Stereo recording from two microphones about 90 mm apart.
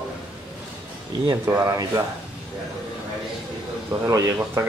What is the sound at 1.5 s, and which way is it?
Speech, 45° right (ahead or behind).